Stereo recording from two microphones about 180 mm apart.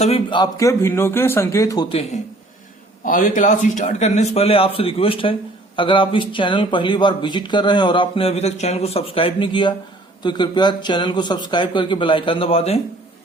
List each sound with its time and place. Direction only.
0.0 s speech: 30° left (ahead or behind)
3.0 s a man's voice: 50° left (ahead or behind)